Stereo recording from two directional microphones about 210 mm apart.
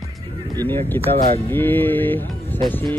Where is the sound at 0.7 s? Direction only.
10° left (ahead or behind).